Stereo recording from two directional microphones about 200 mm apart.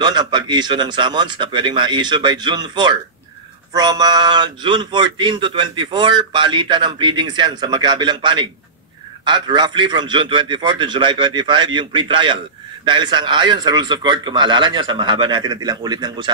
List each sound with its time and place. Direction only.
0.0 s a man's voice: 20° right (ahead or behind)